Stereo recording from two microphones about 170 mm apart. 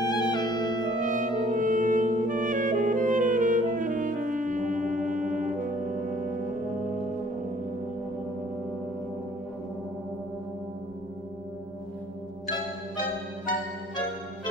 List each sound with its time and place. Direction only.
0.0 s music: 25° left (ahead or behind)
1.1 s music: 50° right (ahead or behind)